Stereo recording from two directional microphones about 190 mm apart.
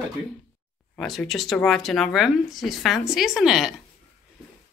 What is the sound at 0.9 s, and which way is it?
Speech, centre (ahead or behind).